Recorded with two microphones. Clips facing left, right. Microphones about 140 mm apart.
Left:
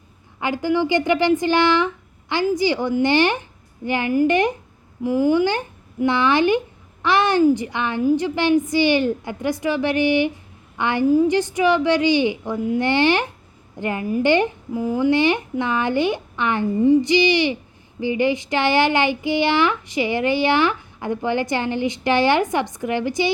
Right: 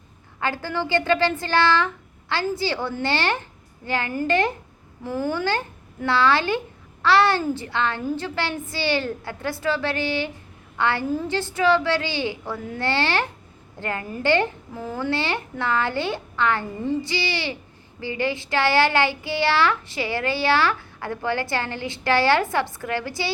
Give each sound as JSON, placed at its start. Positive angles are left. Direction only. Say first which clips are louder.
{"t": 0.3, "sound": "speech", "louder": "left 6 dB", "side_deg": 15}